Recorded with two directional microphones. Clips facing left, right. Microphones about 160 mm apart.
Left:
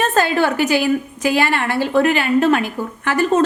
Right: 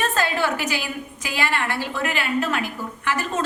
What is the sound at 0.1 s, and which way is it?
A woman's voice, 60° left (ahead or behind).